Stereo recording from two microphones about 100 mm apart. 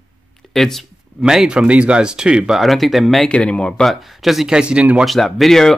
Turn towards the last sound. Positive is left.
turn(degrees=5)  # may be behind; listen again after turning